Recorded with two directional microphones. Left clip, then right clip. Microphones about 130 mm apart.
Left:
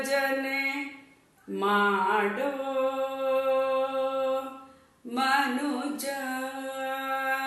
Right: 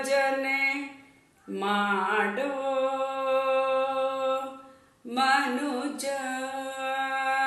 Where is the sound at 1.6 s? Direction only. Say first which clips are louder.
Left 2 dB; 20° right (ahead or behind).